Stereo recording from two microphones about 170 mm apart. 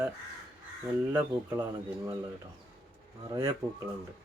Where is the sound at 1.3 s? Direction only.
25° right (ahead or behind).